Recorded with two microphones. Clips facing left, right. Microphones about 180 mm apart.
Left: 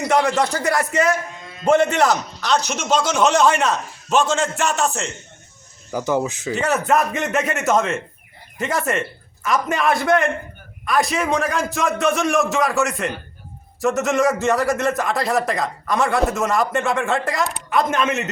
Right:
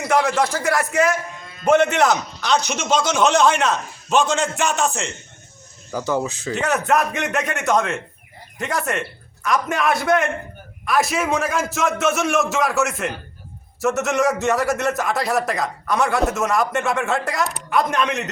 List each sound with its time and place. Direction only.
0.0 s a man's voice: centre (ahead or behind)
5.9 s speech: 15° left (ahead or behind)
6.5 s a man's voice: centre (ahead or behind)